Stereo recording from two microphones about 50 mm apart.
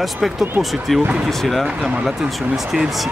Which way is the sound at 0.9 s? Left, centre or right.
Centre.